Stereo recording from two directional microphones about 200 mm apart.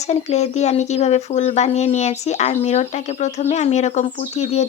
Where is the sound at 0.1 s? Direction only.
35° left (ahead or behind).